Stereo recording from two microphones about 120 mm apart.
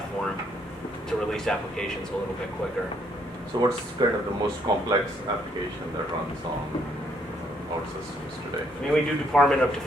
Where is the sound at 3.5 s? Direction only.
35° right (ahead or behind).